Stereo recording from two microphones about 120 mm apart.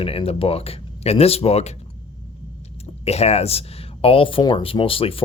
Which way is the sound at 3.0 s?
60° left (ahead or behind).